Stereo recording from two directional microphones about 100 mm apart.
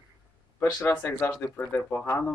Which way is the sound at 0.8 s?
20° left (ahead or behind).